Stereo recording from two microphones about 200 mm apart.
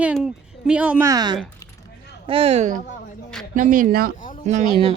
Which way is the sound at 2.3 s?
30° right (ahead or behind).